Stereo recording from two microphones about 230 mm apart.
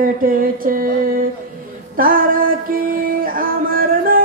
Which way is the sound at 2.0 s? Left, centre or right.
Right.